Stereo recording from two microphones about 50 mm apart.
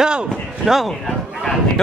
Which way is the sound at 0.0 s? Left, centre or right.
Centre.